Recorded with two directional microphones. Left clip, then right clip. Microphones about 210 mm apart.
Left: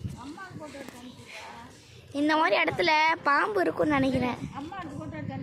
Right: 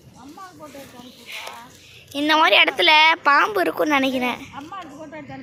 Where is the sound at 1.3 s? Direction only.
Centre (ahead or behind).